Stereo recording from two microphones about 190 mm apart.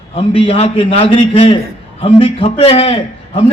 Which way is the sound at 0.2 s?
30° left (ahead or behind).